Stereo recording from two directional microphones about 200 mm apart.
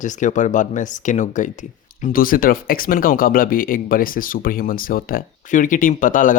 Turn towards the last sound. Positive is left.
turn(degrees=40)  # may be behind; listen again after turning